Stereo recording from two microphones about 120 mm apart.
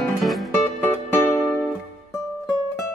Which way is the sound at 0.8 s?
20° left (ahead or behind).